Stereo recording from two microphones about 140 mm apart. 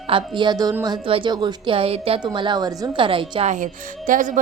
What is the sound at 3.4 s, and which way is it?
Speech, 65° right (ahead or behind).